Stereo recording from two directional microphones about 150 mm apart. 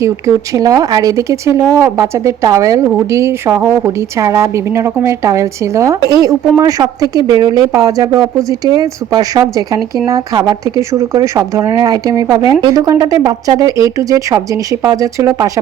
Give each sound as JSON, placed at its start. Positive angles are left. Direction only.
{"t": 0.0, "sound": "speech", "side_deg": -20}